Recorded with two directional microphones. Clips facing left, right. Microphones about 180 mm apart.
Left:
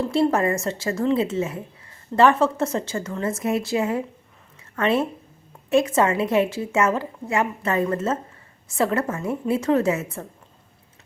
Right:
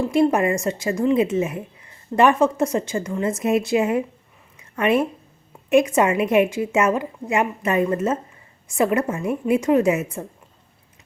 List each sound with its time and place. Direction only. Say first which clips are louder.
0.0 s a woman's voice: right 2 dB; 15° right (ahead or behind)